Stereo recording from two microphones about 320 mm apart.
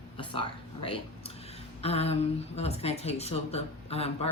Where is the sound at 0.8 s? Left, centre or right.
Centre.